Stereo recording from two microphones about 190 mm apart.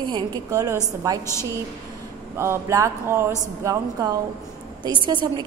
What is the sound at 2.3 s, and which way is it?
A woman's voice, 15° right (ahead or behind).